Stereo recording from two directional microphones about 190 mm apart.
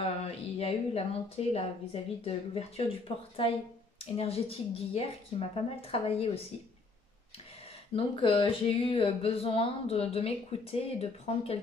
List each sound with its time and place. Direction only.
0.6 s speech: 30° left (ahead or behind)
7.6 s speech: 30° left (ahead or behind)